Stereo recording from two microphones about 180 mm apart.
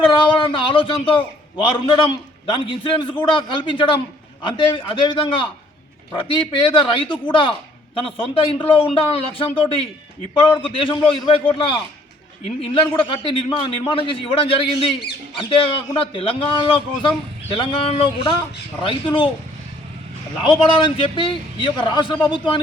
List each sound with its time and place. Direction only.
0.2 s a man's voice: 25° left (ahead or behind)
20.4 s a man's voice: 30° left (ahead or behind)